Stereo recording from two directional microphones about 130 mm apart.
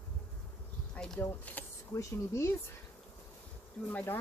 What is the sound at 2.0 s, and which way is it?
Speech, 20° left (ahead or behind).